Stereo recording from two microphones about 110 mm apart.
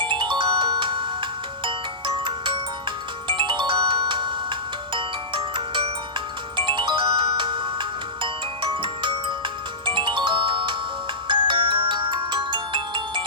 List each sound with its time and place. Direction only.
0.0 s ringtone: 45° right (ahead or behind)
3.2 s music: 50° right (ahead or behind)
5.5 s ringtone: 50° right (ahead or behind)